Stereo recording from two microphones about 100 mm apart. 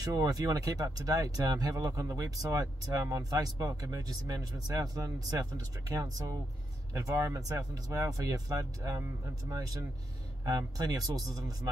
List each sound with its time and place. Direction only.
0.0 s speech: 35° right (ahead or behind)